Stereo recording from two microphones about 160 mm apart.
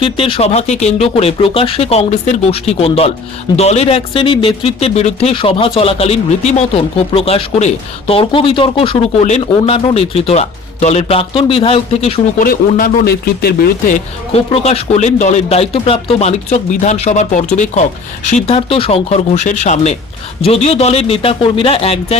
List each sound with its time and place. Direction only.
0.0 s speech: 35° left (ahead or behind)
12.4 s speech: 60° left (ahead or behind)
13.1 s speech: 75° left (ahead or behind)
14.3 s speech: 40° left (ahead or behind)